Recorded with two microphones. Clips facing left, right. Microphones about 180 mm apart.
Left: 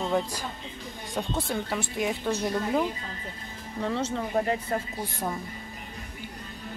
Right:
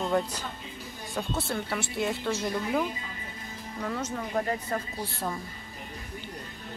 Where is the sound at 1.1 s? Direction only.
15° left (ahead or behind).